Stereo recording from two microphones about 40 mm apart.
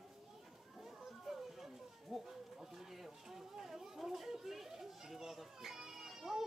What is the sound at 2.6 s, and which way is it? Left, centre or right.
Chatter, centre.